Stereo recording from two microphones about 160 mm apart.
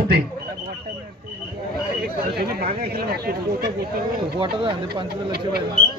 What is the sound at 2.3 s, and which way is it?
Speech, 80° right.